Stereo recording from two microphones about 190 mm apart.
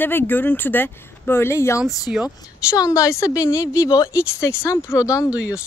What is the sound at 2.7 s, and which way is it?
Speech, 15° left (ahead or behind).